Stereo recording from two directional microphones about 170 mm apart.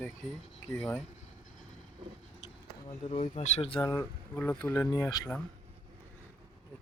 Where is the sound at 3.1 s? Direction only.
35° left (ahead or behind).